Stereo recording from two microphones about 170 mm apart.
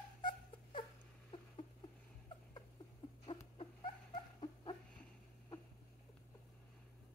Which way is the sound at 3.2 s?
35° left (ahead or behind).